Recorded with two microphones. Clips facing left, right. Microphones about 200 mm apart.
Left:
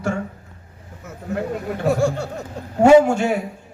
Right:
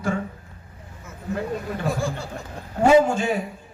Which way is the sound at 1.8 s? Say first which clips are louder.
Left 11 dB; 65° left (ahead or behind).